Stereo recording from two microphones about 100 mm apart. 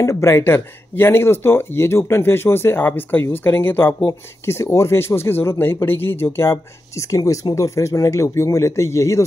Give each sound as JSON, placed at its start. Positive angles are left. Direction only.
{"t": 0.0, "sound": "speech", "side_deg": 25}